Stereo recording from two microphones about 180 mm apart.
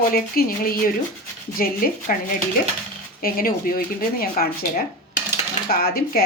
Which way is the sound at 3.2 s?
55° left (ahead or behind).